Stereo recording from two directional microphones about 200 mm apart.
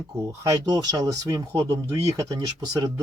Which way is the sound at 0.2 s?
15° right (ahead or behind).